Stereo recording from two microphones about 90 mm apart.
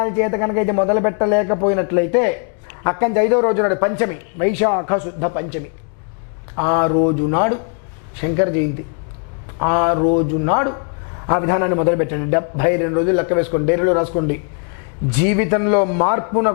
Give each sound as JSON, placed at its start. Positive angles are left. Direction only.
{"t": 0.0, "sound": "speech", "side_deg": 15}